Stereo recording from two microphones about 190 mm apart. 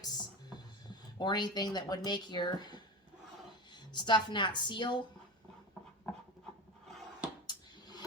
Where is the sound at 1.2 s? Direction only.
20° left (ahead or behind).